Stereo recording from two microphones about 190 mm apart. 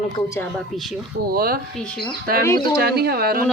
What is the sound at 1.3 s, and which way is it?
Speech, 50° right (ahead or behind).